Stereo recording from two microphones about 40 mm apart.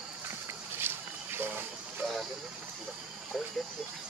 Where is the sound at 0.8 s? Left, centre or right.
Right.